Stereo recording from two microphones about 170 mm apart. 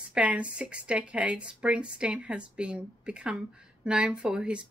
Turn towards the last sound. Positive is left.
turn(degrees=-5)  # may be behind; listen again after turning